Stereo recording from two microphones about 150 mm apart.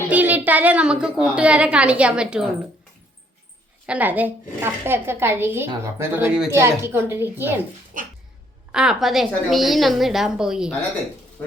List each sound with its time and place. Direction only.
0.1 s a woman's voice: 10° right (ahead or behind)
3.8 s a woman's voice: 10° right (ahead or behind)
7.9 s dog: 60° right (ahead or behind)
8.7 s a woman's voice: 5° right (ahead or behind)